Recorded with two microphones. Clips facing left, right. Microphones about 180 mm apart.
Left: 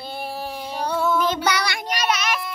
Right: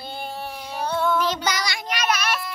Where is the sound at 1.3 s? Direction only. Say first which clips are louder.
Left 3 dB; 60° left (ahead or behind).